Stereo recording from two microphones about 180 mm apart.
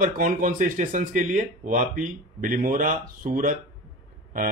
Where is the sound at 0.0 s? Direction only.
50° right (ahead or behind).